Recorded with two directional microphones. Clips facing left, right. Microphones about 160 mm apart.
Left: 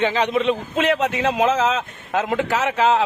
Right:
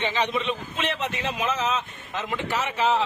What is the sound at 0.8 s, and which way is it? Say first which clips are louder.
A man's voice: left 10 dB; 90° left.